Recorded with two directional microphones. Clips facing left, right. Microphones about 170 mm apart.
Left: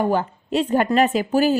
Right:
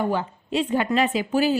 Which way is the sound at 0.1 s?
45° left (ahead or behind).